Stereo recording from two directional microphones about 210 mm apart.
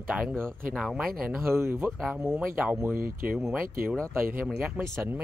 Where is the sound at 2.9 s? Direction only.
45° right (ahead or behind).